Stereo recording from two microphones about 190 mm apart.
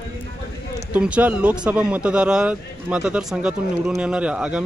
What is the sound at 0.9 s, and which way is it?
Speech, 5° right (ahead or behind).